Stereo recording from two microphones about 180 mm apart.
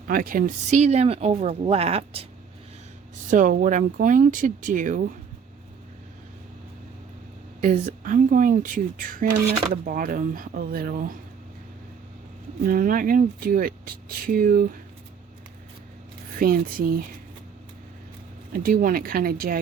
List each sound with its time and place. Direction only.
0.1 s speech: 50° right (ahead or behind); by 2.2 s 35° right (ahead or behind)
3.2 s speech: 45° right (ahead or behind)
7.6 s speech: 45° right (ahead or behind)
12.6 s speech: 50° right (ahead or behind)
16.4 s speech: 50° right (ahead or behind)
18.5 s speech: 55° right (ahead or behind)